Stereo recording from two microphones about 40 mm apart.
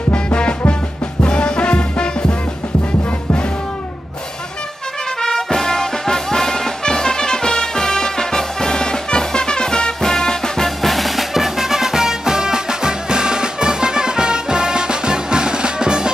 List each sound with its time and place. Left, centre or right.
0.1 s music: left
5.2 s music: centre
10.8 s music: centre; by 16.1 s right